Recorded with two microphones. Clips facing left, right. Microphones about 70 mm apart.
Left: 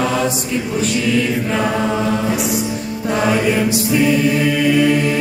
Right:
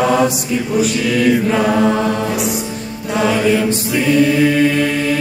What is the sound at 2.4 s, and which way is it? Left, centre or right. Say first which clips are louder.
Music: even; centre.